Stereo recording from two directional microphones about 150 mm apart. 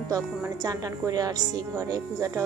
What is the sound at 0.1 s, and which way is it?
Speech, 25° right (ahead or behind).